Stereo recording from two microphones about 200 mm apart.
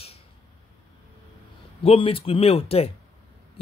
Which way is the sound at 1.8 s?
30° left (ahead or behind).